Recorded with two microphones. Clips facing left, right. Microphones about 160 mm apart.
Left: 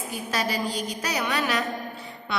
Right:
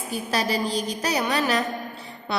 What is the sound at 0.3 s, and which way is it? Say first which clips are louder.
A woman's voice: right 2 dB; 30° right (ahead or behind).